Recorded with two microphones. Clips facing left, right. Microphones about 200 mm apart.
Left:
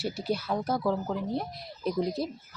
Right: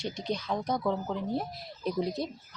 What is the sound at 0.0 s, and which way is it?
A woman's voice, 5° left (ahead or behind).